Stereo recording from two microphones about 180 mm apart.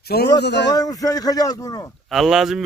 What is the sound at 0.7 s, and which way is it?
Speech, 20° left (ahead or behind).